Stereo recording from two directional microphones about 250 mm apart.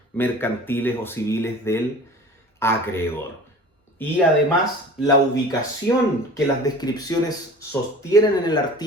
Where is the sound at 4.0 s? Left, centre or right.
Centre.